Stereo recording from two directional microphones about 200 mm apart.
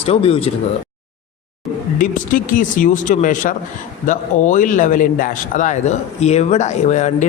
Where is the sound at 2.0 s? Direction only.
40° left (ahead or behind).